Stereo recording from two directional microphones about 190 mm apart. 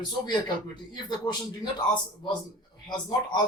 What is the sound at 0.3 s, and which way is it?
Speech, 25° left (ahead or behind).